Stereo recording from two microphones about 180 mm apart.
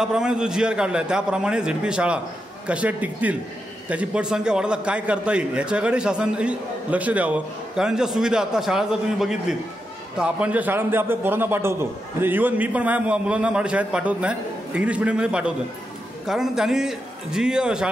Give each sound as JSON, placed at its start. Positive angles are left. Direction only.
{"t": 0.0, "sound": "a man's voice", "side_deg": -5}